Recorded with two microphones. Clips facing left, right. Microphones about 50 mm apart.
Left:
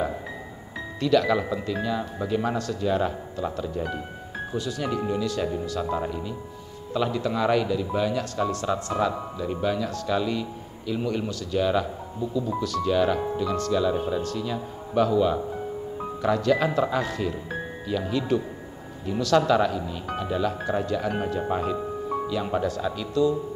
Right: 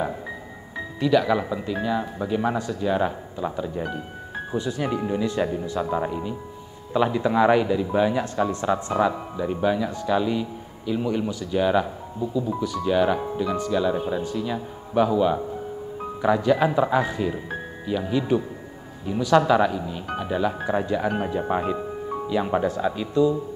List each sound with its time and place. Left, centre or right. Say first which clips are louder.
0.9 s a man's voice: right 1 dB; centre